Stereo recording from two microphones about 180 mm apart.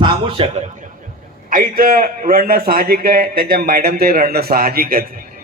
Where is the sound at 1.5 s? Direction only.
50° right (ahead or behind).